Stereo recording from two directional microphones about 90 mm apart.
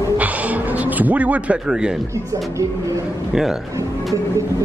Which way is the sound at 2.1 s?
35° right (ahead or behind).